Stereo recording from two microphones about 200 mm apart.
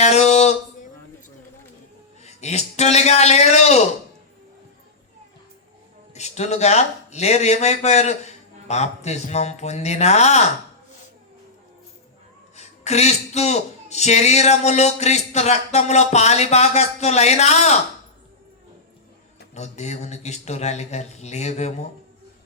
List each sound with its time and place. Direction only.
0.0 s a sound: 35° left (ahead or behind)
2.2 s speech: 35° left (ahead or behind)
6.1 s speech: 35° left (ahead or behind)
12.5 s speech: 35° left (ahead or behind)
19.5 s speech: 35° left (ahead or behind)